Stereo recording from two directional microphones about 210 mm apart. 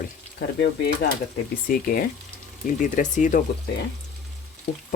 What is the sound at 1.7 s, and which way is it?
Speech, 45° left (ahead or behind).